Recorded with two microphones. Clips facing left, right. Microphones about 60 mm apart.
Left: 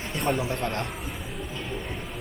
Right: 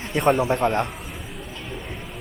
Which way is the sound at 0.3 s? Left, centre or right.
Right.